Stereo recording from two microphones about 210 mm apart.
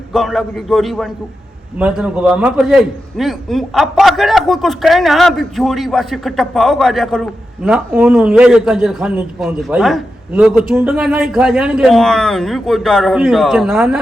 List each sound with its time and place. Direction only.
0.1 s a man's voice: centre (ahead or behind)